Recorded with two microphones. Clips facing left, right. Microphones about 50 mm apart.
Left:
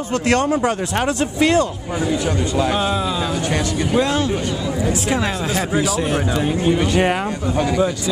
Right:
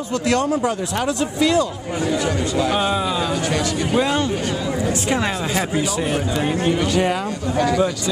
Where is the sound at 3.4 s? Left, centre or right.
Left.